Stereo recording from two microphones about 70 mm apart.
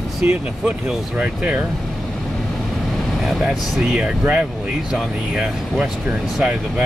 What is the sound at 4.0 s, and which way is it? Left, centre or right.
Speech, centre.